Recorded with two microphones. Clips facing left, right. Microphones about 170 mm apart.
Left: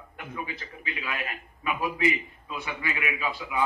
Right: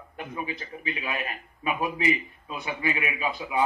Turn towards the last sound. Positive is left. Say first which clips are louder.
# right 2 dB
turn(degrees=-20)  # may be behind; listen again after turning